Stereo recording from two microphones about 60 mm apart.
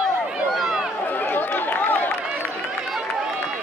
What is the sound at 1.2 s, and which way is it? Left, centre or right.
Chatter, left.